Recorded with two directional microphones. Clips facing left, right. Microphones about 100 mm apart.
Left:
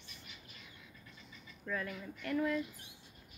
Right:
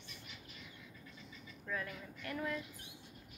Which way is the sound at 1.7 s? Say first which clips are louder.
Left 3 dB; 15° right (ahead or behind).